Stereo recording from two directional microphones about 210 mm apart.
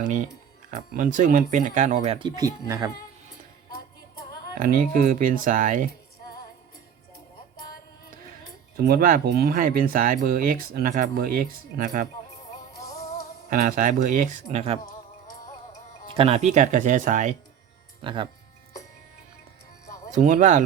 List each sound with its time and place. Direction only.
0.0 s speech: 35° right (ahead or behind)
2.1 s speech: 20° right (ahead or behind)
4.5 s speech: 45° right (ahead or behind)
8.7 s speech: 45° right (ahead or behind)
13.5 s speech: 40° right (ahead or behind)
16.1 s speech: 30° right (ahead or behind)
18.0 s speech: 25° right (ahead or behind)
20.1 s speech: 35° right (ahead or behind)